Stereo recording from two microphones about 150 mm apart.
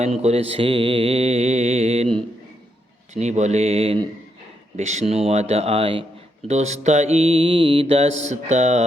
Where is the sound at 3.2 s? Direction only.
50° right (ahead or behind).